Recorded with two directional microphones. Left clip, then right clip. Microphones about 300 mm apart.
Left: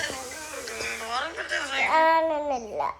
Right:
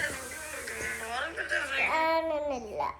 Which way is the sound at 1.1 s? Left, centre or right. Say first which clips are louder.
Left 3 dB; left.